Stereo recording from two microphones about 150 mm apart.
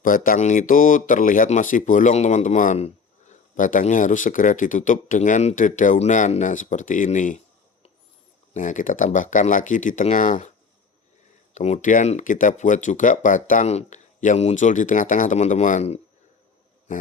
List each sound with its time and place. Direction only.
0.0 s speech: 65° left (ahead or behind)
8.5 s speech: 60° left (ahead or behind)
11.5 s speech: 50° left (ahead or behind)